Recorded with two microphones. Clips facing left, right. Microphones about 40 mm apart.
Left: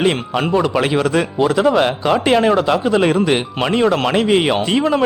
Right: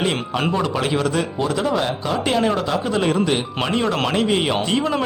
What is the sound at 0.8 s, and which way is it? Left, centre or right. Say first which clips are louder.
Speech: left 5 dB; left.